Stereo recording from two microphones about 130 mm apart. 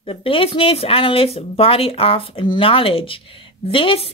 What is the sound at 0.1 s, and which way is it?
A woman's voice, 45° left (ahead or behind).